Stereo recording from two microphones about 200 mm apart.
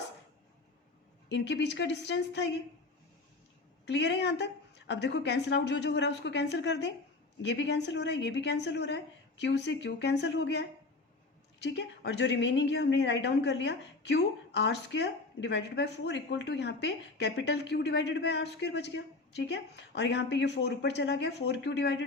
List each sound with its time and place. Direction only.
1.3 s speech: 60° left (ahead or behind)
3.8 s speech: 60° left (ahead or behind)